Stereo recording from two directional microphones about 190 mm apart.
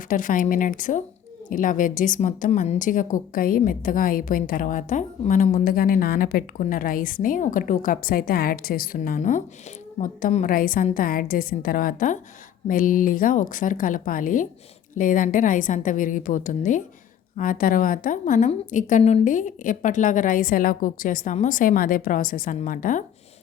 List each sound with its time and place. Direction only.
0.1 s a woman's voice: 45° left (ahead or behind)